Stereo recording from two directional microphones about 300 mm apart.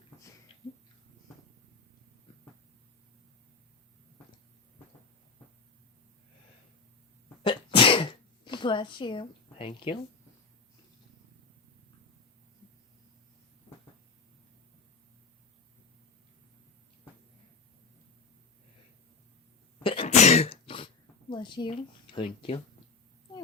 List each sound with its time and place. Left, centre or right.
0.2 s a sound: centre
7.4 s sneeze: centre
19.8 s throat clearing: centre